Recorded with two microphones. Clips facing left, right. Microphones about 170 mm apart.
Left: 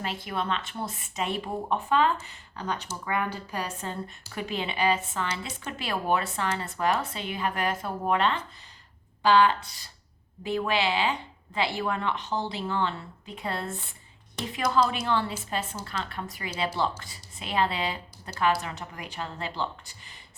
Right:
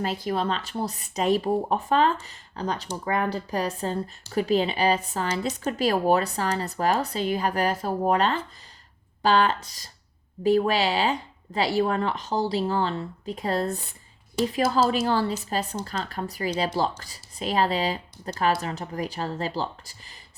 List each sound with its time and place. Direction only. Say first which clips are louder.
0.0 s speech: right 5 dB; 40° right (ahead or behind)